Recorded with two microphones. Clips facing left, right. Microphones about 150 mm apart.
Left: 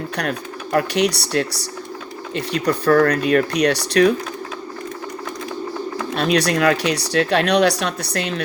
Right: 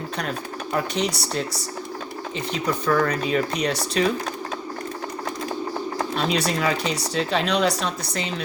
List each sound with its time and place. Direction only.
0.2 s speech: 70° left (ahead or behind)
6.1 s speech: 70° left (ahead or behind)